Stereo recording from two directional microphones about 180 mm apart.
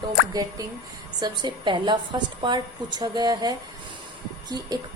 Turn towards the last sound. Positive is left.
turn(degrees=-25)  # may be behind; listen again after turning